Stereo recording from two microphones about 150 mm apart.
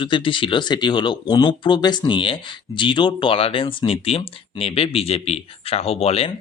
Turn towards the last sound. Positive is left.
turn(degrees=40)  # may be behind; listen again after turning